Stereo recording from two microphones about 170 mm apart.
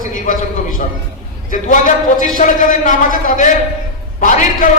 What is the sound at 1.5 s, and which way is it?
A man's voice, 50° left (ahead or behind).